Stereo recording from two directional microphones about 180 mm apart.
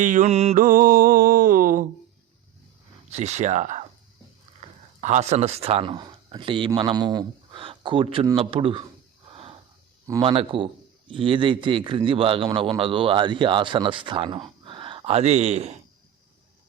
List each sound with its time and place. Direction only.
0.0 s mantra: 45° right (ahead or behind)
3.1 s a man's voice: 40° right (ahead or behind)
9.3 s a sound: 35° right (ahead or behind)
10.2 s a man's voice: 30° right (ahead or behind)